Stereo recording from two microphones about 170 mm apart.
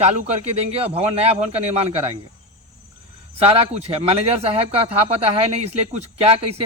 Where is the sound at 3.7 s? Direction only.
35° right (ahead or behind).